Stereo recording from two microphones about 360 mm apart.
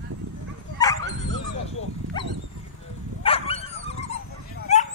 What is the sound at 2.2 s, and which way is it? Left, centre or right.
Dog, centre.